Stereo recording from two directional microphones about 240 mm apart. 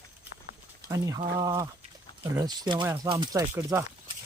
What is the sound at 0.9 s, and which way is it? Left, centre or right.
Speech, centre.